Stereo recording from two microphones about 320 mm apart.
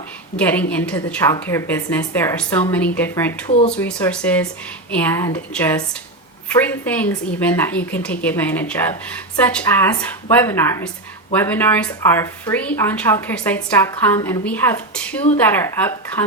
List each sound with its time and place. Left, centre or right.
0.3 s speech: centre
3.5 s speech: centre
3.8 s speech: centre